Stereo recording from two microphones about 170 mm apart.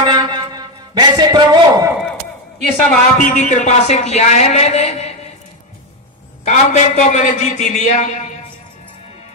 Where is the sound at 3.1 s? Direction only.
45° left (ahead or behind).